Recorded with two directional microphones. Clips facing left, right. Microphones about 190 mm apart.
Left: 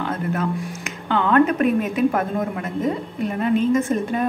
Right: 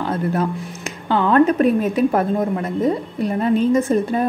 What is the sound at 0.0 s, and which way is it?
Music, 35° right (ahead or behind).